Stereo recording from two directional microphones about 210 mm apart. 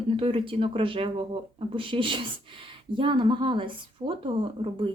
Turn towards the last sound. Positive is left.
turn(degrees=-25)  # may be behind; listen again after turning